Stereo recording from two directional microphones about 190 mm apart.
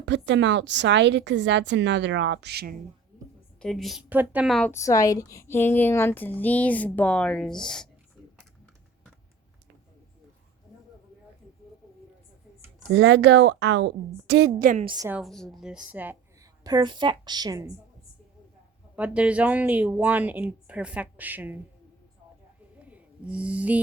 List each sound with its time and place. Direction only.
0.0 s a woman's voice: 70° right (ahead or behind)
3.6 s a woman's voice: centre (ahead or behind)
4.7 s a woman's voice: 15° left (ahead or behind)
12.9 s a woman's voice: 65° right (ahead or behind)
14.6 s a woman's voice: 40° right (ahead or behind)
14.8 s a woman's voice: 20° right (ahead or behind)
15.1 s a woman's voice: centre (ahead or behind)
16.6 s a woman's voice: 20° right (ahead or behind)
18.9 s speech: 5° right (ahead or behind)
22.8 s a sound: 5° right (ahead or behind)